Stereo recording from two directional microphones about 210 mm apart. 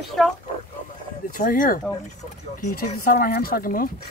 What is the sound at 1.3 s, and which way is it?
Speech, 40° left (ahead or behind).